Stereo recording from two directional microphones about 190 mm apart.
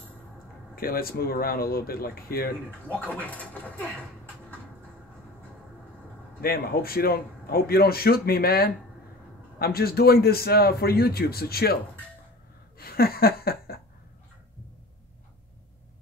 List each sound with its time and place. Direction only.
0.7 s speech: 50° left (ahead or behind)
2.9 s speech: 10° left (ahead or behind)
6.4 s speech: 55° left (ahead or behind)
12.7 s a sound: 55° left (ahead or behind)